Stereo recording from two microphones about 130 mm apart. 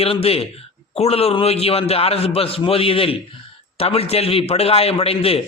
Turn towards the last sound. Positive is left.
turn(degrees=50)  # may be behind; listen again after turning